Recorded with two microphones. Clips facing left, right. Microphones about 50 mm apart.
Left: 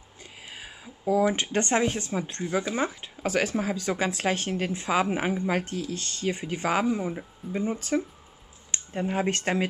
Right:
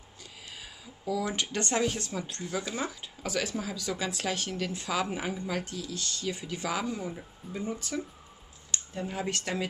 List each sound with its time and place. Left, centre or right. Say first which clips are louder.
0.2 s speech: left 3 dB; left